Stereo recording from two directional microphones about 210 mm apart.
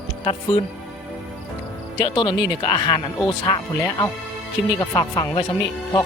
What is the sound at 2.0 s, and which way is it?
Speech, 20° left (ahead or behind).